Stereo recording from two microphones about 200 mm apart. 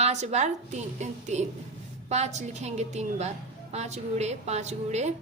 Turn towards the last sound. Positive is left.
turn(degrees=-35)  # may be behind; listen again after turning